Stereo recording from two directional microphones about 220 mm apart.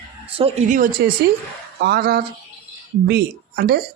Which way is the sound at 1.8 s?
45° right (ahead or behind).